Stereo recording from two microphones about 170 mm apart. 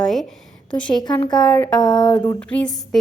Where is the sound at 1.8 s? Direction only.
25° left (ahead or behind).